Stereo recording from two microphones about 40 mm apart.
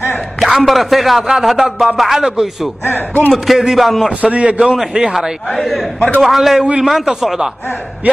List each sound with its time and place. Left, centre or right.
0.4 s speech: centre
2.8 s speech: left
3.4 s speech: centre
4.2 s a man's voice: right
4.6 s a man's voice: centre
5.5 s speech: centre